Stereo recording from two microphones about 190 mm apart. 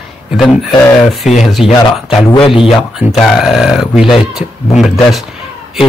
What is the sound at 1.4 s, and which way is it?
Speech, centre (ahead or behind).